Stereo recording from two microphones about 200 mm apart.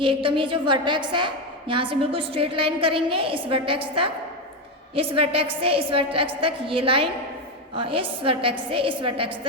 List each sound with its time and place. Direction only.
0.0 s a woman's voice: 25° right (ahead or behind)